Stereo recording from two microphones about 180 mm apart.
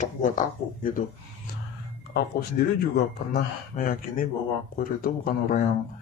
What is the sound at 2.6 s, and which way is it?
Speech, 55° left (ahead or behind).